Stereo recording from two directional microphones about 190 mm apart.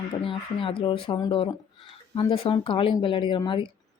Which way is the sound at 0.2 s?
25° left (ahead or behind).